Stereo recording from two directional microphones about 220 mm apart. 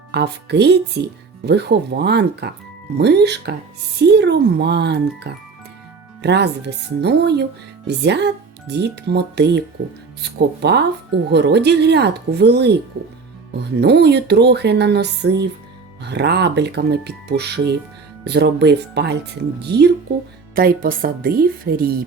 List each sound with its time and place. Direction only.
0.1 s speech: 50° right (ahead or behind)
13.7 s a woman's voice: 50° right (ahead or behind)